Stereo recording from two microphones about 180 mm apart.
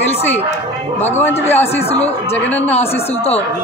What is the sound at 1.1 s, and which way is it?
Speech, 10° left (ahead or behind).